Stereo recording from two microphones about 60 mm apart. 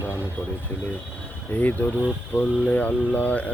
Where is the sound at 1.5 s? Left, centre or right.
Left.